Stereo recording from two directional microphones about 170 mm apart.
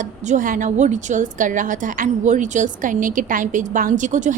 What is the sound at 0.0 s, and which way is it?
A woman's voice, 45° right (ahead or behind).